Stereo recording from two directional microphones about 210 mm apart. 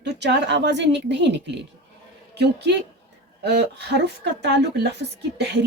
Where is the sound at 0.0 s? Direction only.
55° right (ahead or behind).